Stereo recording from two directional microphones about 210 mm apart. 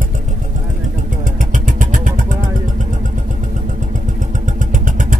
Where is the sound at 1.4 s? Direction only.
40° right (ahead or behind).